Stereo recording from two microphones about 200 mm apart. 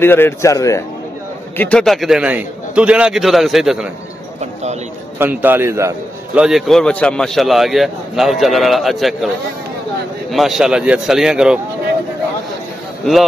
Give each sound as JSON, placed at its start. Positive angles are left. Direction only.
{"t": 0.0, "sound": "a man's voice", "side_deg": 10}
{"t": 1.6, "sound": "a man's voice", "side_deg": 5}
{"t": 5.2, "sound": "a man's voice", "side_deg": -10}
{"t": 6.4, "sound": "a man's voice", "side_deg": 0}
{"t": 10.3, "sound": "a man's voice", "side_deg": 0}